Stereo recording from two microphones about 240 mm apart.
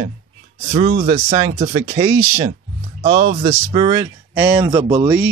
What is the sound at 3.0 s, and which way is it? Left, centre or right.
Speech, right.